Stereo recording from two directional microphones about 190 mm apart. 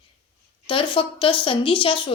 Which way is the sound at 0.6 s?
25° left (ahead or behind).